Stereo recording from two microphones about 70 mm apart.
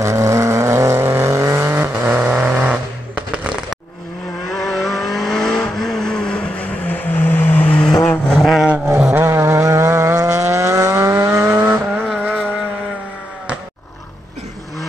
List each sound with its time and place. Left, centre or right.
0.0 s vehicle: right
1.8 s vehicle: right
4.5 s vehicle: centre; by 7.8 s left
8.4 s vehicle: centre
8.6 s vehicle: centre
9.2 s vehicle: right
12.2 s vehicle: right